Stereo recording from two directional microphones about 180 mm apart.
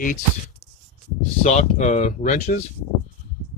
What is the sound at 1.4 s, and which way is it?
Speech, 40° left (ahead or behind).